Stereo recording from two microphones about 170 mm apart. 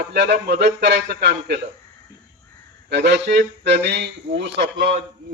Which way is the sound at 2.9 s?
85° right.